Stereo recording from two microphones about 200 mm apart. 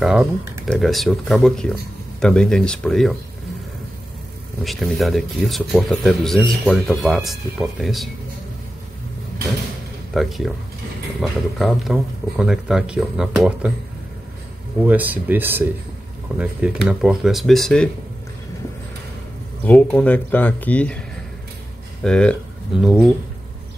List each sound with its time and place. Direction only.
0.0 s speech: 5° right (ahead or behind)
4.6 s speech: centre (ahead or behind)
10.1 s speech: centre (ahead or behind)
14.9 s speech: 10° right (ahead or behind)
19.6 s speech: 5° left (ahead or behind)
22.0 s speech: 5° left (ahead or behind)